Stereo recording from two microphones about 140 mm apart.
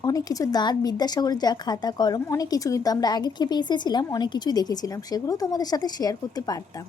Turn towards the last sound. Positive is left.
turn(degrees=30)  # may be behind; listen again after turning